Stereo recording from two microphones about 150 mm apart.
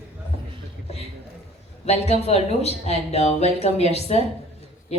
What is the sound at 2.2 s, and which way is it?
Speech, 45° left (ahead or behind).